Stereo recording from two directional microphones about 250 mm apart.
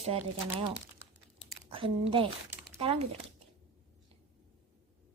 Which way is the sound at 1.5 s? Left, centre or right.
Right.